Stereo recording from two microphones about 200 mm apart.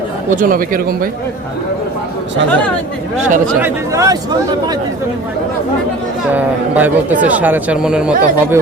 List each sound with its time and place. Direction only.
0.3 s speech: 45° right (ahead or behind)
3.2 s speech: 40° right (ahead or behind)
3.6 s a man's voice: 15° right (ahead or behind)
6.3 s a man's voice: 10° right (ahead or behind)